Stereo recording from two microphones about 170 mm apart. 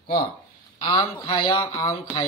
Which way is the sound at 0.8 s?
30° left (ahead or behind).